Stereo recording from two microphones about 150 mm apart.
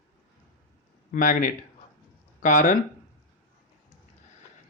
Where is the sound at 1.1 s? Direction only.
65° left (ahead or behind).